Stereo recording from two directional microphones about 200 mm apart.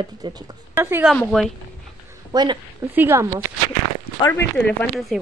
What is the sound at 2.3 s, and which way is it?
Speech, 20° right (ahead or behind).